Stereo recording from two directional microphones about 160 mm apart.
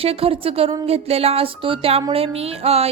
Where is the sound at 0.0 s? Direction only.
35° right (ahead or behind).